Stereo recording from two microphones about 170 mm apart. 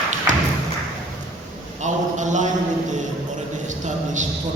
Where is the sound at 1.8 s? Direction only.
45° right (ahead or behind).